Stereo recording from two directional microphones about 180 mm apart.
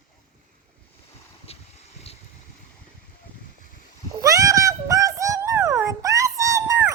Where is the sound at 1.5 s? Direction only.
35° left (ahead or behind).